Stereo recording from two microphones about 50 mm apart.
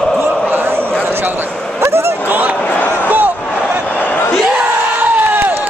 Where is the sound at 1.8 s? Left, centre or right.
Right.